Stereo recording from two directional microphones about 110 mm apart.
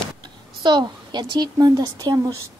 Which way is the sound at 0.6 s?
45° right (ahead or behind).